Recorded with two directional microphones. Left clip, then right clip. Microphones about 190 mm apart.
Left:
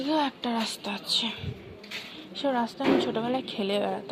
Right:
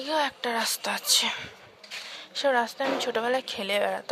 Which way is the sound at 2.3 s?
35° right (ahead or behind).